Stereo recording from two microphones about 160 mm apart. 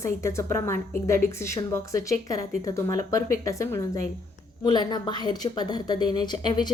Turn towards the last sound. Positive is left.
turn(degrees=25)  # may be behind; listen again after turning